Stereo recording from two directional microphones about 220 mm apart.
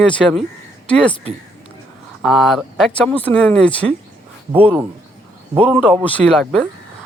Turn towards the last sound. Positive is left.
turn(degrees=5)  # may be behind; listen again after turning